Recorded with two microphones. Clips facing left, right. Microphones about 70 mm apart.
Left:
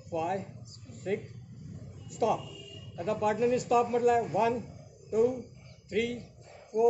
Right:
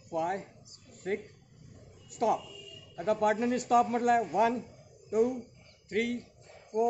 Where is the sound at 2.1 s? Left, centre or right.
Right.